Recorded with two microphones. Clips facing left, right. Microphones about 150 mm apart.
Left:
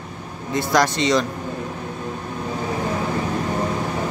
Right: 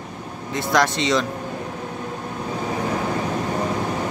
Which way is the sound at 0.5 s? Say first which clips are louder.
Left 1 dB; centre (ahead or behind).